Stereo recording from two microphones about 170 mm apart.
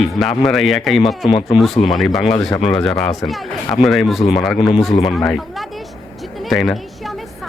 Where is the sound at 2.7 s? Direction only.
Centre (ahead or behind).